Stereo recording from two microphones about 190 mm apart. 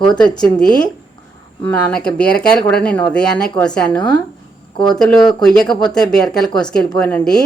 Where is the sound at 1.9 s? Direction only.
5° left (ahead or behind).